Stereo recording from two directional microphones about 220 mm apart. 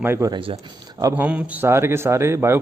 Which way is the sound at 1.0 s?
5° right (ahead or behind).